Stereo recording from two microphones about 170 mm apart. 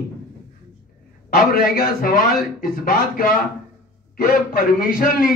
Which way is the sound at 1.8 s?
65° left (ahead or behind).